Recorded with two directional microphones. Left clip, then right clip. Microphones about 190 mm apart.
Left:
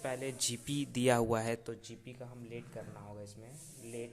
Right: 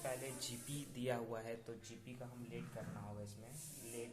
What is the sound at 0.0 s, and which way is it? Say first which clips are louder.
Speech: left 8 dB; 55° left (ahead or behind).